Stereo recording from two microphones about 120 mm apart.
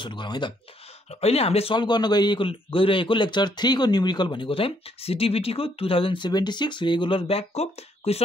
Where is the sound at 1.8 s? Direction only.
35° left (ahead or behind).